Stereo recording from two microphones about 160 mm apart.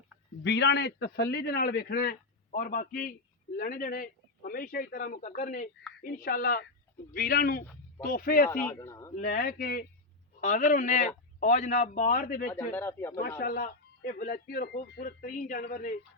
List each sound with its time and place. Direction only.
0.4 s a man's voice: 90° left; by 8.4 s 65° left (ahead or behind)
8.6 s speech: 15° left (ahead or behind)
9.1 s speech: 60° left (ahead or behind)
10.4 s a man's voice: 55° left (ahead or behind)
12.7 s speech: 15° left (ahead or behind)
13.4 s speech: 65° left (ahead or behind)